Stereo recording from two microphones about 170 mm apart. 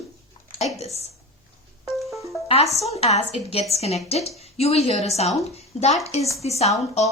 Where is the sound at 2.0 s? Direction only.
Centre (ahead or behind).